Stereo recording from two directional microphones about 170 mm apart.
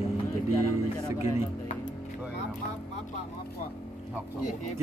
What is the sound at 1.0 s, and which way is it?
Speech, 15° right (ahead or behind).